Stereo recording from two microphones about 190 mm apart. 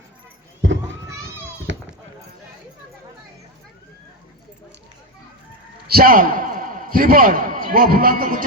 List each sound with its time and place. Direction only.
0.6 s a sound: 80° right
1.7 s goat: 75° right (ahead or behind)
5.9 s a man's voice: 50° right (ahead or behind)